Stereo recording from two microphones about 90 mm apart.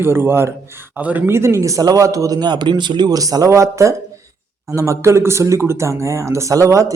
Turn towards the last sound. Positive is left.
turn(degrees=-35)  # may be behind; listen again after turning